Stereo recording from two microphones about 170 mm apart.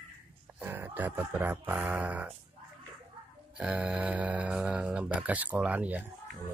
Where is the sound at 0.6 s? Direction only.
10° right (ahead or behind).